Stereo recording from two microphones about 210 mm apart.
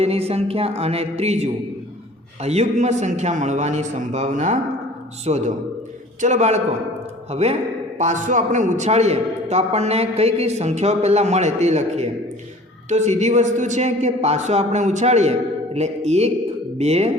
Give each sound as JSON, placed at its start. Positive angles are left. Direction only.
{"t": 0.0, "sound": "a woman's voice", "side_deg": -30}